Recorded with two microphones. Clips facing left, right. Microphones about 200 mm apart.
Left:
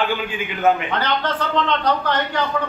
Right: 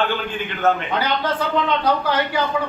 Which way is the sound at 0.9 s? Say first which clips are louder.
Right 1 dB; 10° right (ahead or behind).